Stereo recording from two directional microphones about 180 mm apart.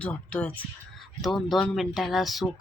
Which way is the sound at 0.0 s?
10° left (ahead or behind).